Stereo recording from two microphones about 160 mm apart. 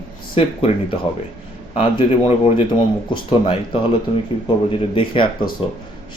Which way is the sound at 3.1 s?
35° left (ahead or behind).